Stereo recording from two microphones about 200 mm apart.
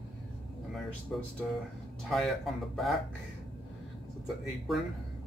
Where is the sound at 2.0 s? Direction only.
Centre (ahead or behind).